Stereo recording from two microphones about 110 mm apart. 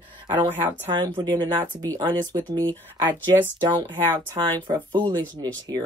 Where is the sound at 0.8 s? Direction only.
45° right (ahead or behind).